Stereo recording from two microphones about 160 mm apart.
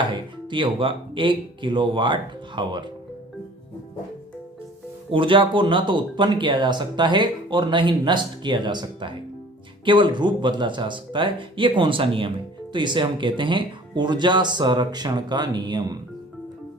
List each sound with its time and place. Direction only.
0.1 s speech: 30° right (ahead or behind)
5.1 s speech: 30° right (ahead or behind)